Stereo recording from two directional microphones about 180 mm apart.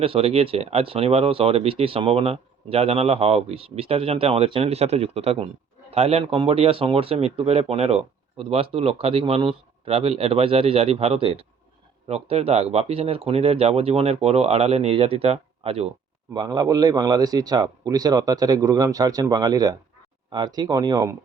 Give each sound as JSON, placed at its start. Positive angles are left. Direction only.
{"t": 0.0, "sound": "speech", "side_deg": -30}
{"t": 16.3, "sound": "a man's voice", "side_deg": -20}